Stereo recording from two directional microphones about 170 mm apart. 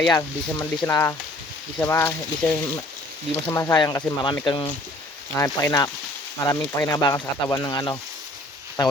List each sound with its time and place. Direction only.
0.1 s speech: 20° left (ahead or behind)
5.3 s speech: 15° left (ahead or behind)